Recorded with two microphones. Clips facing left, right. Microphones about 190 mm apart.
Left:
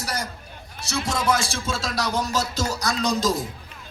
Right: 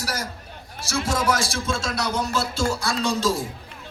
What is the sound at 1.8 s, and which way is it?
A man's voice, 35° left (ahead or behind).